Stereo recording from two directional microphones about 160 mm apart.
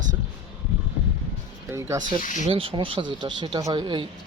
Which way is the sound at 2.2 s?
50° left (ahead or behind).